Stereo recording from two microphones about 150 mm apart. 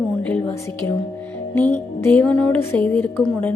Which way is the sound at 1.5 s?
15° left (ahead or behind).